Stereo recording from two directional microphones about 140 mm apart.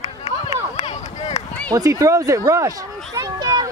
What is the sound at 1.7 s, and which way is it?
Speech, 25° right (ahead or behind).